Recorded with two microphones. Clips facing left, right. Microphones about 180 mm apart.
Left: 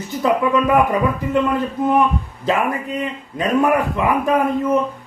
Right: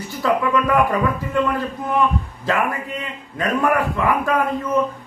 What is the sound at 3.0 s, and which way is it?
A man's voice, 20° left (ahead or behind).